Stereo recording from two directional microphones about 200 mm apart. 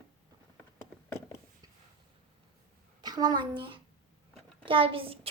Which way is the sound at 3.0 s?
20° right (ahead or behind).